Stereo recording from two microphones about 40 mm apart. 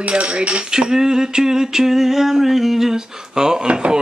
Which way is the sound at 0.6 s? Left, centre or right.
Centre.